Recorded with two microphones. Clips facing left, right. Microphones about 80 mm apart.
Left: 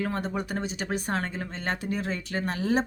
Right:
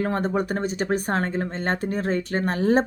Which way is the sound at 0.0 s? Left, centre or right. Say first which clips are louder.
Right 6 dB; right.